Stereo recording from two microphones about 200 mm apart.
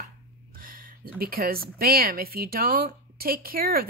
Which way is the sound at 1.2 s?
50° right (ahead or behind).